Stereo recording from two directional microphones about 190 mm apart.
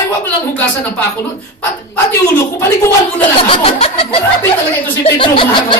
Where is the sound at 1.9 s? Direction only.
10° left (ahead or behind).